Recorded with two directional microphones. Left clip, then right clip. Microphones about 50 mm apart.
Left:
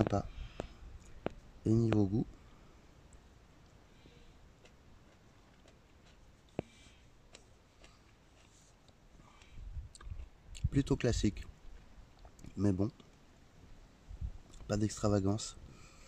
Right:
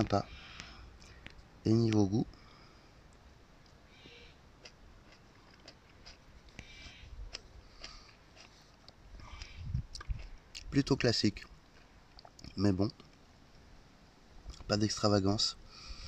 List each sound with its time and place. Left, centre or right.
0.1 s a sound: centre
1.6 s speech: centre
10.0 s chewing: centre
10.7 s speech: centre
14.7 s speech: centre